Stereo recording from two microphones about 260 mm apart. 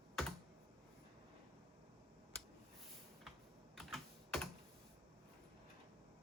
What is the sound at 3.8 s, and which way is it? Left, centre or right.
Computer keyboard, centre.